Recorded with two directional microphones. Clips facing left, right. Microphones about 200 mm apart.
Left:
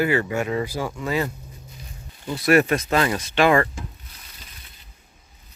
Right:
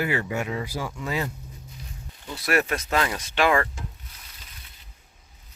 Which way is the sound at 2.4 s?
Centre (ahead or behind).